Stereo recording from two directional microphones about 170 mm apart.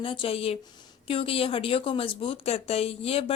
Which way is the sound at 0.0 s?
30° left (ahead or behind).